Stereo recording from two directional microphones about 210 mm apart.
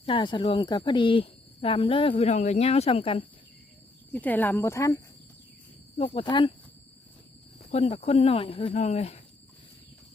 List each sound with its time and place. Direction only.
0.0 s speech: 25° left (ahead or behind)
4.1 s speech: 10° left (ahead or behind)
6.0 s speech: 25° left (ahead or behind)
7.7 s speech: 30° left (ahead or behind)